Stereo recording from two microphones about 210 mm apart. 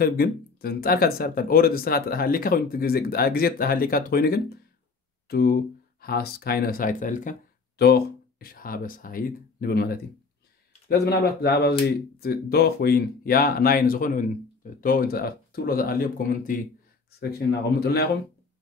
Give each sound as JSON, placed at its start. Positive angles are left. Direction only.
{"t": 0.0, "sound": "speech", "side_deg": 45}